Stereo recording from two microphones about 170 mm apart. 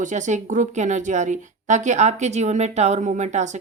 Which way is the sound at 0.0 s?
45° right (ahead or behind).